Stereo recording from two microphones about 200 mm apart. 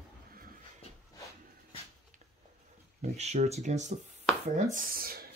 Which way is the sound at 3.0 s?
35° right (ahead or behind).